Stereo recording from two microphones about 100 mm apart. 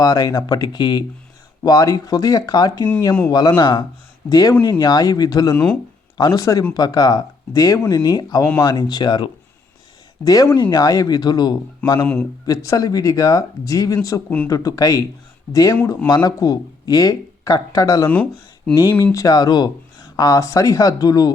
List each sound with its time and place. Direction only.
0.0 s speech: 35° left (ahead or behind)
1.6 s speech: 35° left (ahead or behind)
4.3 s speech: 40° left (ahead or behind)
10.2 s speech: 35° left (ahead or behind)
11.9 s a man's voice: 15° left (ahead or behind)
12.5 s speech: 35° left (ahead or behind)
14.3 s speech: 20° left (ahead or behind)
14.5 s speech: 35° left (ahead or behind)
18.1 s speech: 10° left (ahead or behind)
19.1 s speech: 40° left (ahead or behind)